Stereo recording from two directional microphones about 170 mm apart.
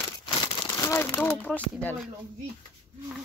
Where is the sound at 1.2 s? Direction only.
10° left (ahead or behind).